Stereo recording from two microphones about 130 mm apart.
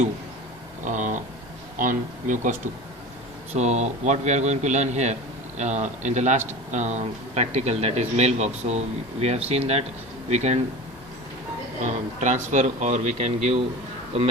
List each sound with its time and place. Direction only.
0.9 s a sound: 75° right (ahead or behind)
1.8 s speech: 85° right
3.5 s speech: 60° right (ahead or behind)
11.9 s speech: 65° right (ahead or behind)